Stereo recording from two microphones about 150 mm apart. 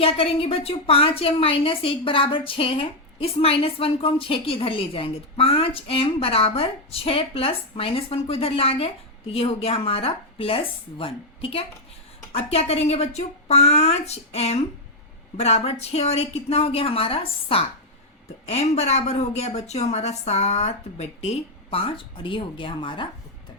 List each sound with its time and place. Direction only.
0.0 s a woman's voice: 40° left (ahead or behind)